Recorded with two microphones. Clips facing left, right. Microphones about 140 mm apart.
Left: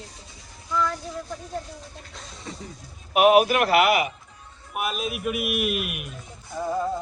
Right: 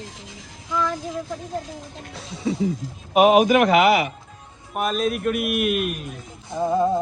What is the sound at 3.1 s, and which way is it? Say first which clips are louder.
Speech: right 2 dB; 40° right (ahead or behind).